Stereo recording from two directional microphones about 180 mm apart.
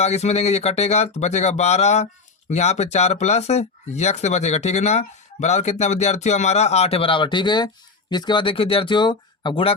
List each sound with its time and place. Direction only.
0.0 s speech: 35° left (ahead or behind)